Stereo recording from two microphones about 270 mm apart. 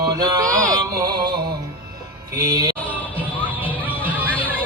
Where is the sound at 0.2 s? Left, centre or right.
Centre.